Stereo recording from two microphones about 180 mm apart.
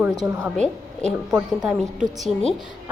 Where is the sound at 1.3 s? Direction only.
5° right (ahead or behind).